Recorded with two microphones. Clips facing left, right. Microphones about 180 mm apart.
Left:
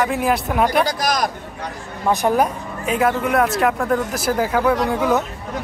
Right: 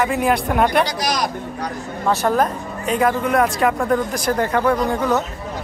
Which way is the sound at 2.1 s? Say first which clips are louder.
Left 1 dB; 15° left (ahead or behind).